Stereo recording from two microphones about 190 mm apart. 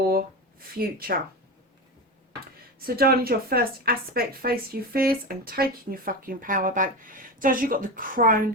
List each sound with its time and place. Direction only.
0.8 s speech: 50° right (ahead or behind)
2.8 s speech: 50° right (ahead or behind)